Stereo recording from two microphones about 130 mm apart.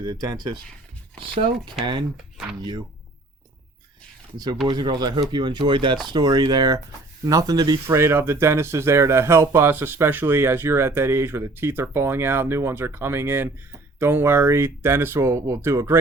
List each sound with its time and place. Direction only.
0.0 s speech: 30° right (ahead or behind)
1.2 s speech: 45° right (ahead or behind)
4.6 s speech: 35° right (ahead or behind)
7.9 s speech: 20° right (ahead or behind)